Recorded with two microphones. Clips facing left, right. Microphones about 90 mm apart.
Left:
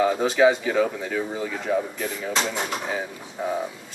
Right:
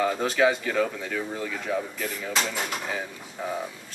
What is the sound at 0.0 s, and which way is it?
Speech, 5° left (ahead or behind).